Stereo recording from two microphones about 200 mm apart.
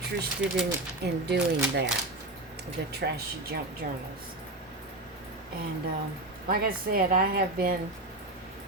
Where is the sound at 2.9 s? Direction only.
50° right (ahead or behind).